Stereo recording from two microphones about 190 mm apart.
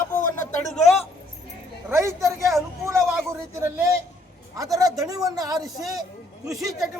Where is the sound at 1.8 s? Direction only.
15° right (ahead or behind).